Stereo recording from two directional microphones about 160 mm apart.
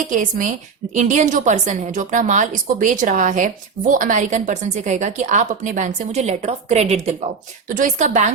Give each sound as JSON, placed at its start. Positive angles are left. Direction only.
{"t": 0.1, "sound": "a woman's voice", "side_deg": -50}
{"t": 7.7, "sound": "a woman's voice", "side_deg": -55}